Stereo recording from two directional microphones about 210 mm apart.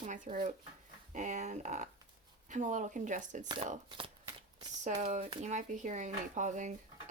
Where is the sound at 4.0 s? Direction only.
25° right (ahead or behind).